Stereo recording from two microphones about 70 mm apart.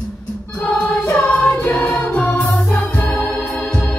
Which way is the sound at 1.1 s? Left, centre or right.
Centre.